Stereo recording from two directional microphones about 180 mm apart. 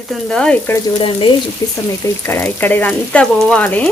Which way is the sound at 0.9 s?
30° left (ahead or behind).